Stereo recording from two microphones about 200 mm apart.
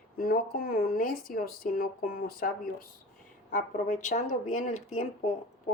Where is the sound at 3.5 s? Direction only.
40° left (ahead or behind).